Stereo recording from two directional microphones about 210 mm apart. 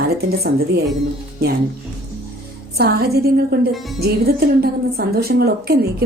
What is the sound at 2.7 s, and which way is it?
A woman's voice, 50° right (ahead or behind).